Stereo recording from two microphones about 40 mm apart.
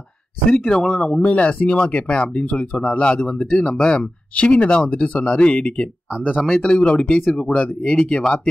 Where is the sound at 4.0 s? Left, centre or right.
Left.